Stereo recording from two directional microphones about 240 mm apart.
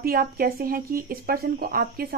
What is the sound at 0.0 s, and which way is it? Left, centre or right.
Speech, right.